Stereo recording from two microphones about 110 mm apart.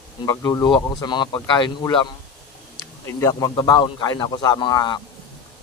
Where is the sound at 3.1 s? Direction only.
30° left (ahead or behind).